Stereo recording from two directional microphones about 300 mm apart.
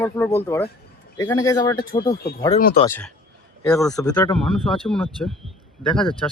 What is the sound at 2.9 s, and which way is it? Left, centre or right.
Speech, centre.